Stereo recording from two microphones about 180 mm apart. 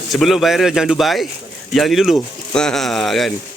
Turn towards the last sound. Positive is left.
turn(degrees=0)  # may be behind; listen again after turning